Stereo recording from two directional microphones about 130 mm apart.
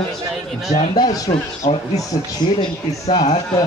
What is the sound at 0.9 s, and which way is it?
Speech, 35° left (ahead or behind).